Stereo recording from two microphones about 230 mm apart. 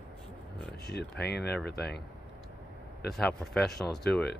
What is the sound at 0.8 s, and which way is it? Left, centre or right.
Speech, left.